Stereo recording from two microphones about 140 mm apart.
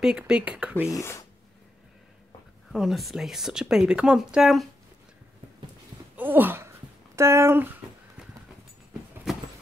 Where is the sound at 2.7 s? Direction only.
Centre (ahead or behind).